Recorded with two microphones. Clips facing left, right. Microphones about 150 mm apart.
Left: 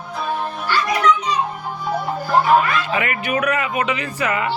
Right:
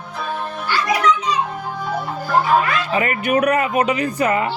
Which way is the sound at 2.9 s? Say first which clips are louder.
Right 3 dB; 35° right (ahead or behind).